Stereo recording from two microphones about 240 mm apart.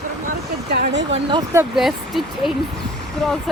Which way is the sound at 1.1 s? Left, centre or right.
Centre.